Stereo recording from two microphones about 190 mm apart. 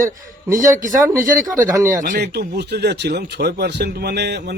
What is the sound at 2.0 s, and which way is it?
Speech, 50° right (ahead or behind).